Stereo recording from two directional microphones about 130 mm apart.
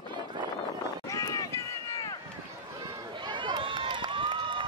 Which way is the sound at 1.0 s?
25° left (ahead or behind).